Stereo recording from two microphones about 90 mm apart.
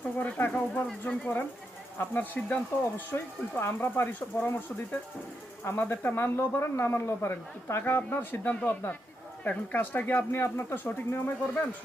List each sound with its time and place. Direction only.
0.2 s speech: 20° left (ahead or behind)
0.9 s speech: 10° left (ahead or behind)